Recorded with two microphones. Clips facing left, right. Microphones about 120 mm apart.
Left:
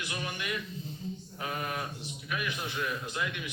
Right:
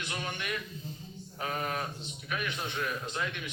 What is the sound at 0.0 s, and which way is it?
A man's voice, 20° right (ahead or behind).